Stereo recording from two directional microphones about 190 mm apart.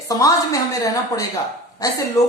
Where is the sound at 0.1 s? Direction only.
20° left (ahead or behind).